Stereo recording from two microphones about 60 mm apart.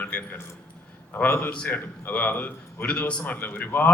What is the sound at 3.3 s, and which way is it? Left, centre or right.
Speech, left.